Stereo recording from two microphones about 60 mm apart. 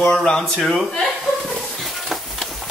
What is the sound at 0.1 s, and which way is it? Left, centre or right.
Speech, centre.